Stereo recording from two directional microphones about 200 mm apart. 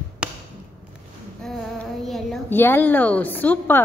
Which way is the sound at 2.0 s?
Centre (ahead or behind).